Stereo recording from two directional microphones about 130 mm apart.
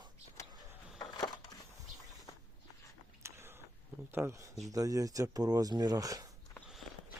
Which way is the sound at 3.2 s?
20° right (ahead or behind).